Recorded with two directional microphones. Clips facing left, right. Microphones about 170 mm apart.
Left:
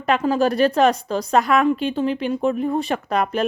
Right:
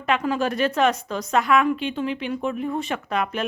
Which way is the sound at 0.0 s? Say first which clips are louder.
Left 4 dB; 35° left (ahead or behind).